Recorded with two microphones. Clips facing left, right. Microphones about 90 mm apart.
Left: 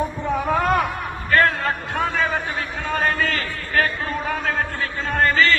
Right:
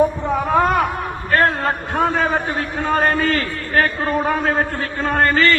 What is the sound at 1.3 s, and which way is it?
A man's voice, 35° right (ahead or behind).